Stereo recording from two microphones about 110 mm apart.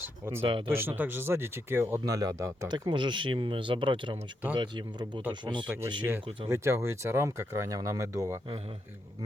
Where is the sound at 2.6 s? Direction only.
45° right (ahead or behind).